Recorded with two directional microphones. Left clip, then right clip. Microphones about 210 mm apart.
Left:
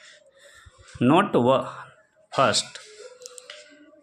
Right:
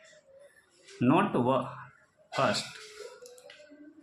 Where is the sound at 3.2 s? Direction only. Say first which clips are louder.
Left 8 dB; 45° left (ahead or behind).